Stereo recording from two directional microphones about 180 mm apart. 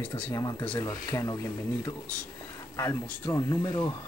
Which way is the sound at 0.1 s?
20° left (ahead or behind).